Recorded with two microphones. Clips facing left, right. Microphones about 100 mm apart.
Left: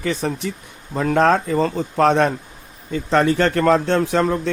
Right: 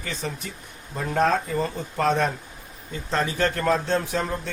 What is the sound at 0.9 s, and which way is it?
Speech, 90° left.